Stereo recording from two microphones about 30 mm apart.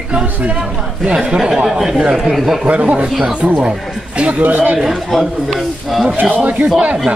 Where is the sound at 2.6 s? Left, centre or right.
Right.